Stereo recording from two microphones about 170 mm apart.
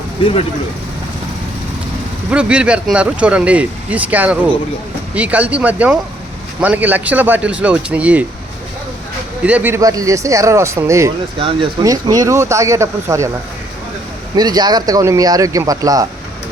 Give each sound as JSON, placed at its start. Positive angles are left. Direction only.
{"t": 0.2, "sound": "speech", "side_deg": 30}
{"t": 2.3, "sound": "speech", "side_deg": -5}
{"t": 9.4, "sound": "speech", "side_deg": -10}
{"t": 11.3, "sound": "speech", "side_deg": -30}
{"t": 14.3, "sound": "speech", "side_deg": -25}